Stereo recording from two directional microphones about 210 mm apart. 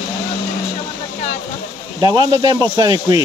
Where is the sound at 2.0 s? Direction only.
20° right (ahead or behind).